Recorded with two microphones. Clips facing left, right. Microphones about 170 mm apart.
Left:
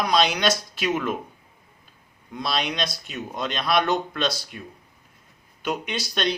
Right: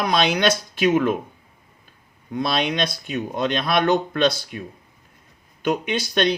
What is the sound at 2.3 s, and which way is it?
Speech, 55° right (ahead or behind).